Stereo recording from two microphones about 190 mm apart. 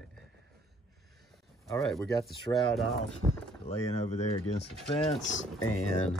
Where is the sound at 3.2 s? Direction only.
25° right (ahead or behind).